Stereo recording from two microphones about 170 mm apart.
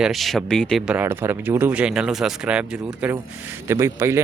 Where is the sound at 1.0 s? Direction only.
15° right (ahead or behind).